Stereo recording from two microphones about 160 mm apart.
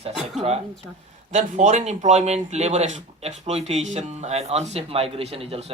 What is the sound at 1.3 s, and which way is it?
Speech, 50° right (ahead or behind).